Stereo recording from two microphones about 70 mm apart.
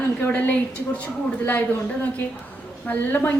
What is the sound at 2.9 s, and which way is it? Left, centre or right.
Speech, left.